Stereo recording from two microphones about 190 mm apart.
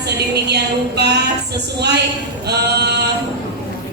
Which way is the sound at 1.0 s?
60° right (ahead or behind).